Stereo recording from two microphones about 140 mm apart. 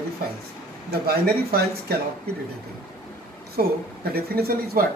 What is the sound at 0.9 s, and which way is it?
Speech, 90° right.